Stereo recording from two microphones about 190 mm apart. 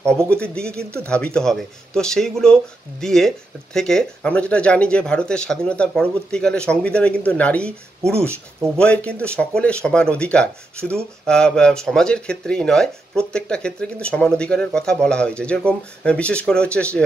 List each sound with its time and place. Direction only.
0.0 s speech: 5° left (ahead or behind)
8.7 s speech: 5° left (ahead or behind)